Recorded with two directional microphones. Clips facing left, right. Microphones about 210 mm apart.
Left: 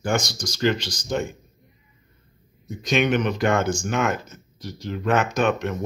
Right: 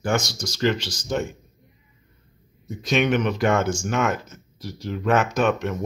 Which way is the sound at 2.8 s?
Centre (ahead or behind).